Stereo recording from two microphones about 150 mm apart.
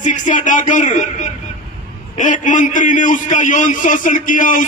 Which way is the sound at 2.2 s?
60° left (ahead or behind).